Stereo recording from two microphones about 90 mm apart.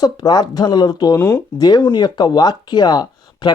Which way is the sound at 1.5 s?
50° left (ahead or behind).